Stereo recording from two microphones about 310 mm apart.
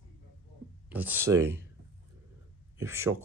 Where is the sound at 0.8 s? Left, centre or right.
Centre.